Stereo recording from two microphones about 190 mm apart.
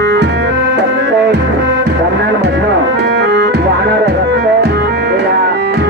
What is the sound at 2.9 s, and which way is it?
Music, 60° right (ahead or behind).